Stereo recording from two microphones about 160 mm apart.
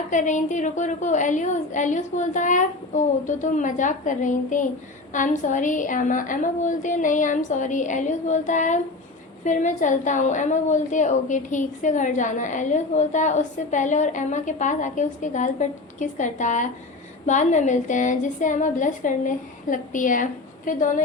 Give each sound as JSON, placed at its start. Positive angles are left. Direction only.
{"t": 0.1, "sound": "a woman's voice", "side_deg": 50}